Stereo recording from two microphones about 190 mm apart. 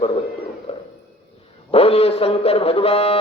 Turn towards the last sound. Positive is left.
turn(degrees=30)  # may be behind; listen again after turning